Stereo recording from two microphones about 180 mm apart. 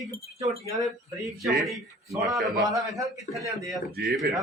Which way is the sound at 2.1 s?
20° right (ahead or behind).